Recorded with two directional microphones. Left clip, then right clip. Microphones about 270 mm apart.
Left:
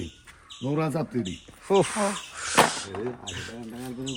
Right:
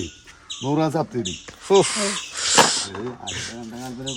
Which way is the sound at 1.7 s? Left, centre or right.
Centre.